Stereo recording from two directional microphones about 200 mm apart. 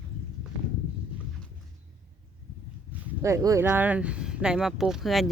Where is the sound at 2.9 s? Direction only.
15° right (ahead or behind).